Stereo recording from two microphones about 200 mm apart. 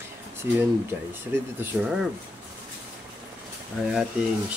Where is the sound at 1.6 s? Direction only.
5° right (ahead or behind).